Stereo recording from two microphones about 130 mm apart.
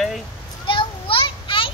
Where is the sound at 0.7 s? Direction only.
40° left (ahead or behind).